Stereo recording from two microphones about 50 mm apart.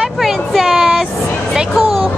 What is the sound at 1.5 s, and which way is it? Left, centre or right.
Music, centre.